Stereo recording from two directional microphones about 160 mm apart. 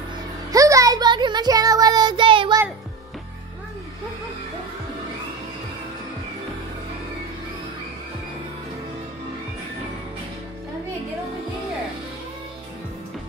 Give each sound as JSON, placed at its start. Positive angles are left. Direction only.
{"t": 0.5, "sound": "child singing", "side_deg": -20}